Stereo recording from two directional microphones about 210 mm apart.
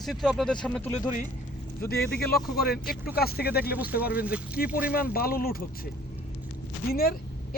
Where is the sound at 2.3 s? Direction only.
45° left (ahead or behind).